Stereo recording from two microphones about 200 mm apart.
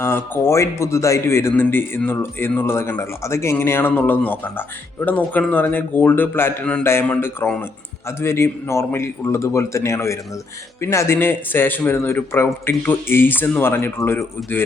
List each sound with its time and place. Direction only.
0.0 s speech: 15° left (ahead or behind)